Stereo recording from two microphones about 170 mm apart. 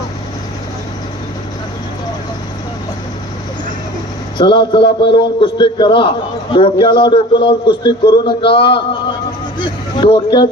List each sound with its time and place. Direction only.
4.4 s a man's voice: 30° left (ahead or behind)